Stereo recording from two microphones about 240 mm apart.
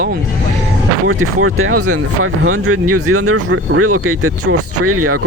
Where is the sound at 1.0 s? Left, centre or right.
Right.